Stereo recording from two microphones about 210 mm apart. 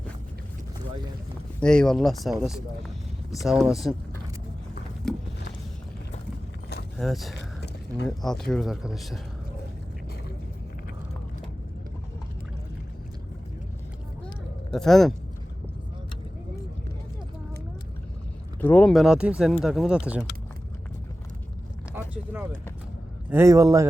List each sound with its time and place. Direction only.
1.5 s speech: 5° left (ahead or behind)
5.0 s a sound: centre (ahead or behind)
7.0 s speech: centre (ahead or behind)
7.3 s a sound: 55° left (ahead or behind)
8.0 s speech: centre (ahead or behind)
14.7 s a man's voice: centre (ahead or behind)
18.6 s speech: 10° left (ahead or behind)
22.1 s a man's voice: 10° right (ahead or behind)